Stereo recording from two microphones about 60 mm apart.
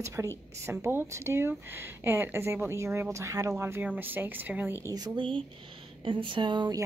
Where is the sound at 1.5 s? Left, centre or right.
Right.